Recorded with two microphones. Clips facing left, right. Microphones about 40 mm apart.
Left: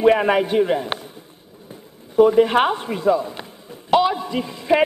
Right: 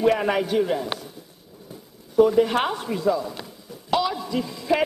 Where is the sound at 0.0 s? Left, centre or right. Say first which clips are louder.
Left 5 dB; left.